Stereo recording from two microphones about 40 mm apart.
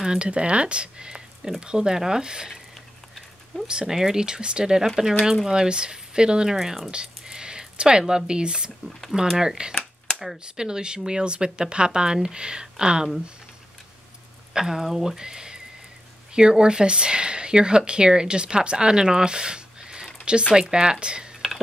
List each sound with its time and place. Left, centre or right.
0.2 s speech: right
3.6 s speech: right
5.2 s speech: centre
5.5 s speech: right
6.6 s speech: centre
6.9 s a sound: right
8.3 s speech: right
14.5 s speech: centre